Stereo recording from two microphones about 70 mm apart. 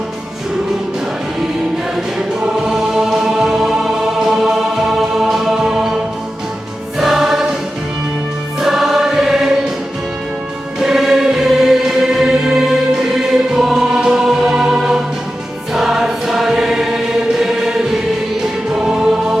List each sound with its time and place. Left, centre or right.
2.1 s choir: centre
4.4 s music: centre
7.0 s choir: centre
8.6 s choir: centre
10.8 s music: centre
15.7 s choir: centre